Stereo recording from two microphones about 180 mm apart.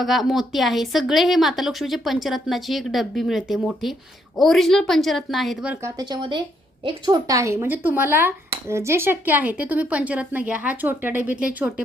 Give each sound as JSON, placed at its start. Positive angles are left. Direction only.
{"t": 0.0, "sound": "a woman's voice", "side_deg": 0}
{"t": 6.0, "sound": "speech", "side_deg": -25}